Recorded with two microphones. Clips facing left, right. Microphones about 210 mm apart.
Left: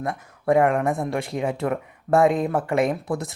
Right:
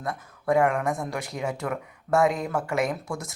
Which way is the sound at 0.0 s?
25° left (ahead or behind).